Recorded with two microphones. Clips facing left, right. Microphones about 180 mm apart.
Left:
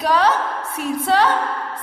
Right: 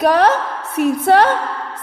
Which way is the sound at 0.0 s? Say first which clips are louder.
Right 4 dB; 60° right (ahead or behind).